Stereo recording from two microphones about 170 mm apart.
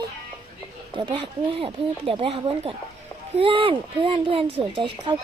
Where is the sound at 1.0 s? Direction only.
30° right (ahead or behind).